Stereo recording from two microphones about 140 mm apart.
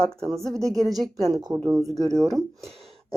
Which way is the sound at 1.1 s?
30° right (ahead or behind).